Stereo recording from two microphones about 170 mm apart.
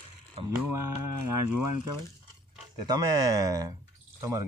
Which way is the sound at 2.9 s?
20° right (ahead or behind).